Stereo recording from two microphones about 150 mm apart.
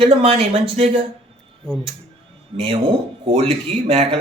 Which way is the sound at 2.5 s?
35° right (ahead or behind).